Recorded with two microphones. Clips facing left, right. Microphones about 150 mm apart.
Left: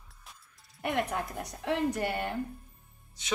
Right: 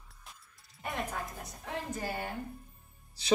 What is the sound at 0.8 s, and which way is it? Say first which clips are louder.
Speech: left 7 dB; 90° left.